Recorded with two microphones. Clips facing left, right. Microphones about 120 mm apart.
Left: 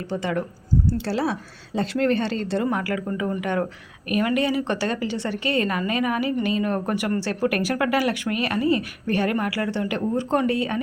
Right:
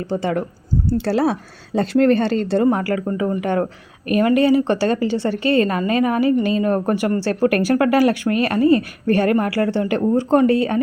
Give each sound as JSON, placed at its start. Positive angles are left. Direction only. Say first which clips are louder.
{"t": 0.1, "sound": "a woman's voice", "louder": "right 4 dB", "side_deg": -35}